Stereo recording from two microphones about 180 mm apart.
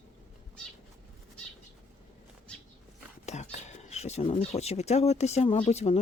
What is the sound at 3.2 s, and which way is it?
Speech, 40° left (ahead or behind).